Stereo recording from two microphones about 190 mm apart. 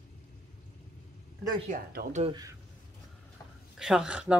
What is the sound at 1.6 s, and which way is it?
Speech, 45° right (ahead or behind).